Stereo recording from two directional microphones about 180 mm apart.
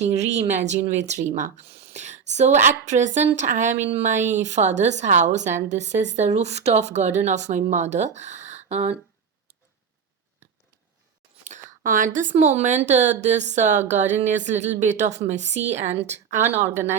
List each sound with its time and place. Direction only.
0.0 s a woman's voice: 40° right (ahead or behind)
11.8 s a woman's voice: 50° right (ahead or behind)
16.6 s speech: 15° right (ahead or behind)